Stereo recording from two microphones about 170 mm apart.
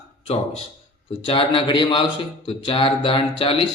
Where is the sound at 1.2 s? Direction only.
30° left (ahead or behind).